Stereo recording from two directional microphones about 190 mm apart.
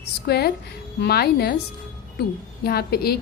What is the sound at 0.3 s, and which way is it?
A woman's voice, 60° left (ahead or behind).